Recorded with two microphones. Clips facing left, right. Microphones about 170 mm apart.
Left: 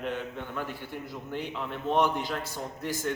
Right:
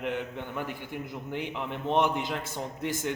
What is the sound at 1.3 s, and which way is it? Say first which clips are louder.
A man's voice: even; 15° right (ahead or behind).